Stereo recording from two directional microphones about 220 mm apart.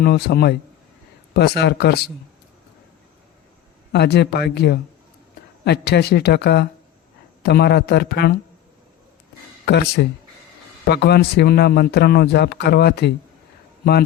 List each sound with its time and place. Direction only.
0.0 s a man's voice: 45° left (ahead or behind)
3.9 s a man's voice: 50° left (ahead or behind)
9.6 s a man's voice: 45° left (ahead or behind)